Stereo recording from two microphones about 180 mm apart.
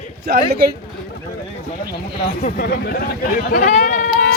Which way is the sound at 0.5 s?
60° right (ahead or behind).